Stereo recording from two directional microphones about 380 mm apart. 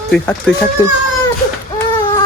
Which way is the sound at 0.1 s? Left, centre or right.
Centre.